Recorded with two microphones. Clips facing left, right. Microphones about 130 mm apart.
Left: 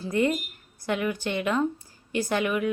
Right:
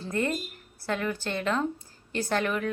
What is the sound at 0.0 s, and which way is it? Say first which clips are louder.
Speech: left 4 dB; 15° left (ahead or behind).